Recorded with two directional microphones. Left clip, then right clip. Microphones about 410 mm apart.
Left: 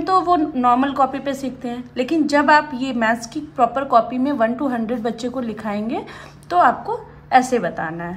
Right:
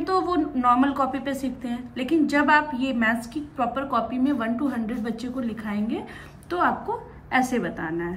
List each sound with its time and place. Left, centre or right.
0.0 s a woman's voice: centre
7.2 s a woman's voice: centre